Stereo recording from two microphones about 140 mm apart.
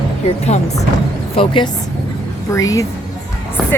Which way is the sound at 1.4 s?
35° left (ahead or behind).